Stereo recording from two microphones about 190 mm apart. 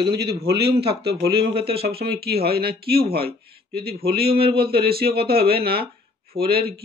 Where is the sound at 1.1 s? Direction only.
30° right (ahead or behind).